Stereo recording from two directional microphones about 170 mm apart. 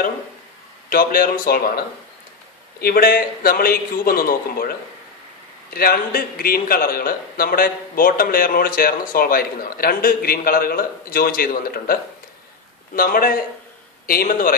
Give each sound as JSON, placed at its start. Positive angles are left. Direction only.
{"t": 0.8, "sound": "a man's voice", "side_deg": 55}
{"t": 2.8, "sound": "a man's voice", "side_deg": 60}